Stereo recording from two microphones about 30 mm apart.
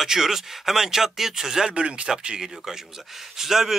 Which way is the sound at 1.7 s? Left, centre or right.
Right.